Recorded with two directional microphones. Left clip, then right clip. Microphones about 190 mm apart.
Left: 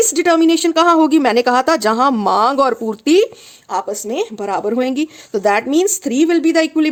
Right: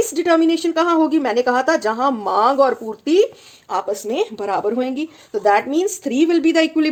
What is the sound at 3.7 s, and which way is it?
Speech, 25° left (ahead or behind).